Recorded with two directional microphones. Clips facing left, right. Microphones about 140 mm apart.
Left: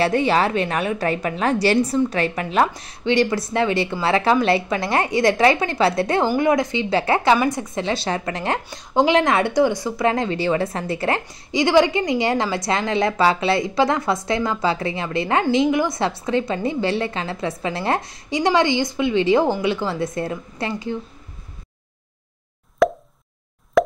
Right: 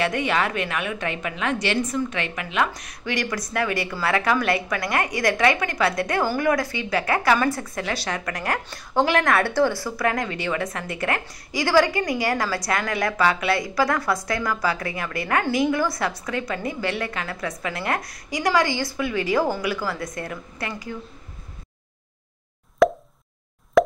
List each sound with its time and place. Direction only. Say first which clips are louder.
0.0 s a woman's voice: left 5 dB; 30° left (ahead or behind)
22.8 s plop: even; centre (ahead or behind)